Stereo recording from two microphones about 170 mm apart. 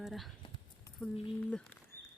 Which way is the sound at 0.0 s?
Centre (ahead or behind).